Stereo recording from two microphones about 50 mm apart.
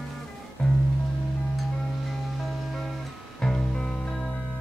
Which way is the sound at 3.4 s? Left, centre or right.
Centre.